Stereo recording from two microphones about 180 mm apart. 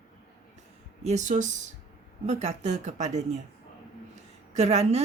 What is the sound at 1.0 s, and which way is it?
Speech, 40° right (ahead or behind).